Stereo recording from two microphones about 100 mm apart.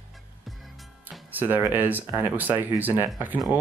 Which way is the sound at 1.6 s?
20° right (ahead or behind).